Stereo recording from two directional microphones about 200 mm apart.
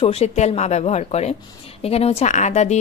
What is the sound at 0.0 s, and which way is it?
Speech, 30° left (ahead or behind).